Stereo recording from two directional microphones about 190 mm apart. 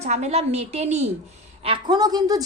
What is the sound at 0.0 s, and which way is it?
A woman's voice, 35° right (ahead or behind).